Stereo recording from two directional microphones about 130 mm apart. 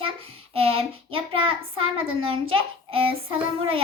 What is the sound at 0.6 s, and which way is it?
A woman's voice, 45° right (ahead or behind).